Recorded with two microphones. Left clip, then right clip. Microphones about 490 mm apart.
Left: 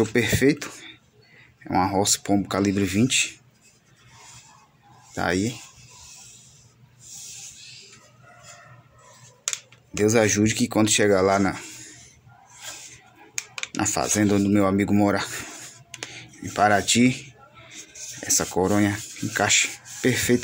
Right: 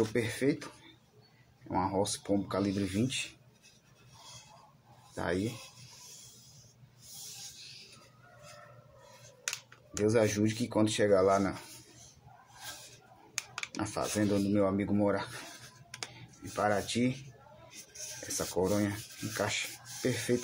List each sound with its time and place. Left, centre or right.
0.1 s speech: centre
5.1 s speech: right
10.0 s speech: centre
13.7 s speech: centre
18.3 s speech: centre